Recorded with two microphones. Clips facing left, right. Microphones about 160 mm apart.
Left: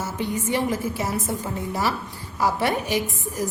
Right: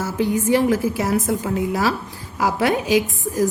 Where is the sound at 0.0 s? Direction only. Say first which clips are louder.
Right 6 dB; 90° right.